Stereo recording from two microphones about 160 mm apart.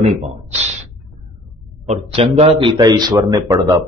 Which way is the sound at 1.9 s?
40° right (ahead or behind).